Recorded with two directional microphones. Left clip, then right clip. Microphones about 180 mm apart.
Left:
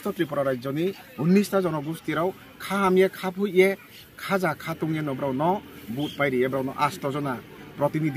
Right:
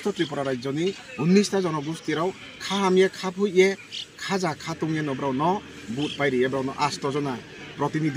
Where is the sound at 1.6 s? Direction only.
5° left (ahead or behind).